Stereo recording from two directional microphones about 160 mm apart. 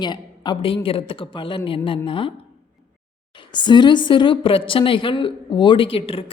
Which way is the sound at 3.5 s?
30° left (ahead or behind).